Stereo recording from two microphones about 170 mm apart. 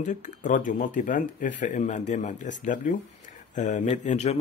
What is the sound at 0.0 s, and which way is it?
Speech, 50° left (ahead or behind).